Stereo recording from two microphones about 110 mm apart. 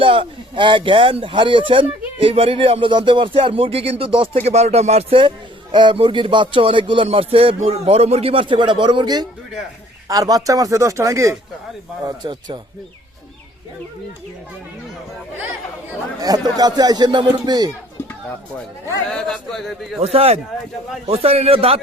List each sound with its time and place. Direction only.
0.0 s speech: 55° right (ahead or behind)
4.4 s speech: 75° right (ahead or behind); by 5.3 s 60° right (ahead or behind)
5.7 s speech: 50° right (ahead or behind); by 11.3 s 30° right (ahead or behind)
12.0 s speech: 40° right (ahead or behind)
16.2 s speech: 35° right (ahead or behind)
19.1 s a man's voice: 5° left (ahead or behind)
20.0 s a man's voice: 65° right (ahead or behind)